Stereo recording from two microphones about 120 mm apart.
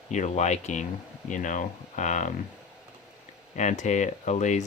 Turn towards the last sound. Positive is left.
turn(degrees=80)